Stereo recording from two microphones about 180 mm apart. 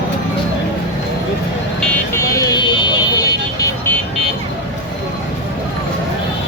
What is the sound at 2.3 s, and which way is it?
Vehicle, 20° left (ahead or behind).